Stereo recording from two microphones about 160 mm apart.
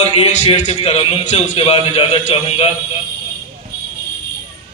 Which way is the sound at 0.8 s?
30° left (ahead or behind).